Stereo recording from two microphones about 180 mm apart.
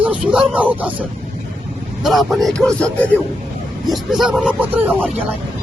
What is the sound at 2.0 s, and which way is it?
A man's voice, centre (ahead or behind).